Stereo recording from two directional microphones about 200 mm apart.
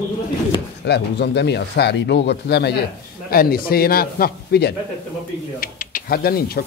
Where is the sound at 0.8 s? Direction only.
55° left (ahead or behind).